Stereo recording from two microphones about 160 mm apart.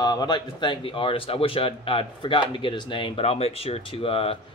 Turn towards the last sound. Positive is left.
turn(degrees=35)  # may be behind; listen again after turning